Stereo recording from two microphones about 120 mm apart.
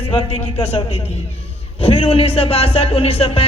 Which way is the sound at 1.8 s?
55° left (ahead or behind).